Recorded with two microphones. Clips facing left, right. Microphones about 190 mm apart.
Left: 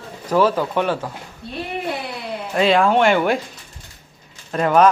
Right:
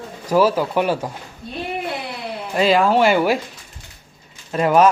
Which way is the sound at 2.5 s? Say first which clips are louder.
Even; centre (ahead or behind).